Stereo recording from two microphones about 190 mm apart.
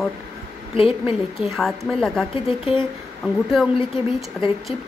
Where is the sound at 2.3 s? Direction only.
30° left (ahead or behind).